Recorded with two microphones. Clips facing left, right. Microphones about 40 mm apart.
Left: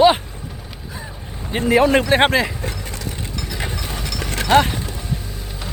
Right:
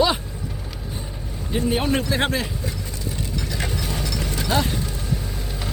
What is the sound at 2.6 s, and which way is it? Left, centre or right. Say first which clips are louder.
Vehicle: left 3 dB; left.